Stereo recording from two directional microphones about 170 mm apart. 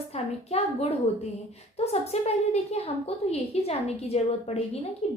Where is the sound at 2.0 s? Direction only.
40° left (ahead or behind).